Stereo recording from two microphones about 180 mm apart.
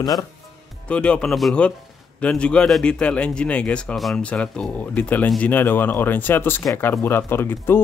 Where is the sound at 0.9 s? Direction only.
5° left (ahead or behind).